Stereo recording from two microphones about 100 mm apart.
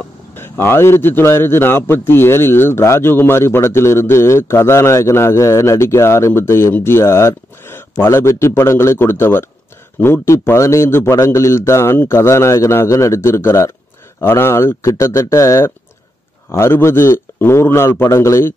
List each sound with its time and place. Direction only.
0.4 s a man's voice: 20° left (ahead or behind)